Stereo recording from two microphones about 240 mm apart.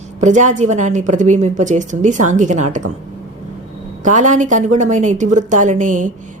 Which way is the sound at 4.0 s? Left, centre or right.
Right.